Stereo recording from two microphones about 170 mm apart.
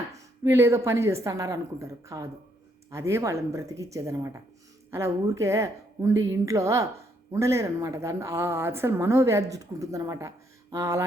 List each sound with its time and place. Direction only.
0.1 s a woman's voice: 15° right (ahead or behind)